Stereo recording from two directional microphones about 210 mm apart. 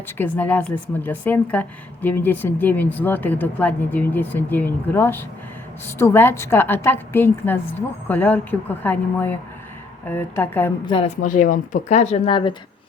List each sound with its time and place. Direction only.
0.2 s a woman's voice: 10° left (ahead or behind)
10.8 s a woman's voice: 25° left (ahead or behind)
11.2 s speech: 40° left (ahead or behind)